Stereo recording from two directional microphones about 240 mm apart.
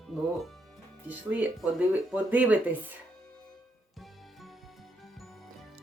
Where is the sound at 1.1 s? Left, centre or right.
Centre.